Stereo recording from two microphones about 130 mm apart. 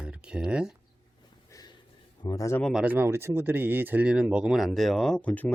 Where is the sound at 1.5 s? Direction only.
30° left (ahead or behind).